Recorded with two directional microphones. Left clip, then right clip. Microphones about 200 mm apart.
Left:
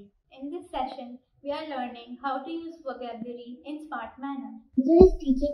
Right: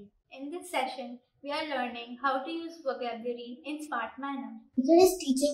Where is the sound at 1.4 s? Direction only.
5° right (ahead or behind).